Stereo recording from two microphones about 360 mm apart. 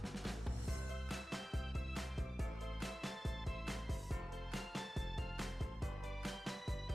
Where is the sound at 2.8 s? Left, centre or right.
Centre.